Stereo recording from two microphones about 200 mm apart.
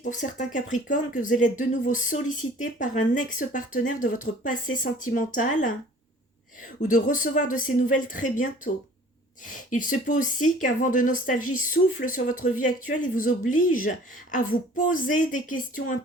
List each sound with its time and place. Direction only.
0.0 s speech: 40° left (ahead or behind)
6.8 s speech: 40° left (ahead or behind)